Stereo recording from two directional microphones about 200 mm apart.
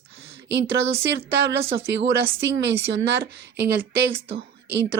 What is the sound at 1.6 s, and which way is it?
Speech, 30° right (ahead or behind).